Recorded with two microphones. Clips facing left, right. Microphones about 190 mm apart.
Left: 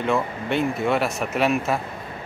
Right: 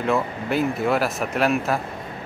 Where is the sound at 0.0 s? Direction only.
Centre (ahead or behind).